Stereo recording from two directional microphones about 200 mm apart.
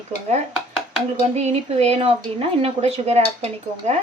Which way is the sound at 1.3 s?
30° right (ahead or behind).